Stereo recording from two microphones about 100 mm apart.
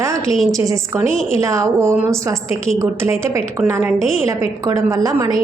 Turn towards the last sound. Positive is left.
turn(degrees=-35)  # may be behind; listen again after turning